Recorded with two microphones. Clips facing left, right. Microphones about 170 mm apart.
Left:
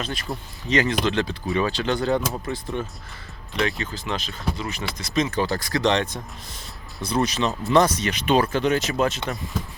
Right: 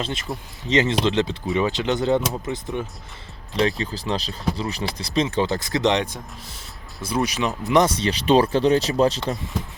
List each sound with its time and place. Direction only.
0.0 s speech: 25° right (ahead or behind)
3.5 s speech: 30° right (ahead or behind)
7.9 s speech: 30° right (ahead or behind)